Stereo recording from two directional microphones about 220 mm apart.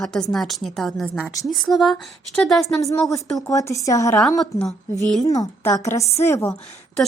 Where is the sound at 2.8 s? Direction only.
15° left (ahead or behind).